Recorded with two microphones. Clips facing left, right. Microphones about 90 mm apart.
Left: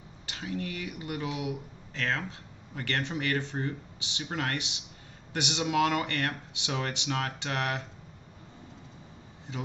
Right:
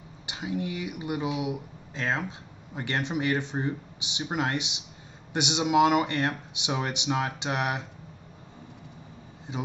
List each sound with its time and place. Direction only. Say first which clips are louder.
0.3 s speech: right 4 dB; 15° right (ahead or behind)
9.5 s speech: right 4 dB; 15° right (ahead or behind)